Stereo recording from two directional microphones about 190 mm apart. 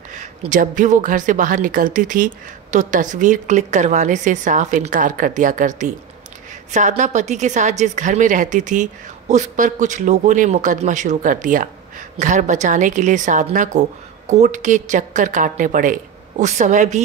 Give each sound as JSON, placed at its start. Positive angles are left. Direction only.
{"t": 0.1, "sound": "a woman's voice", "side_deg": -40}